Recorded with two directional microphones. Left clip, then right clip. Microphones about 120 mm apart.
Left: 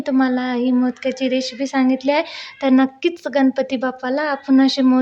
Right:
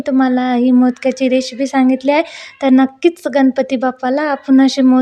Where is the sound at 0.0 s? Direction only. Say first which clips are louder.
Right 4 dB; 40° right (ahead or behind).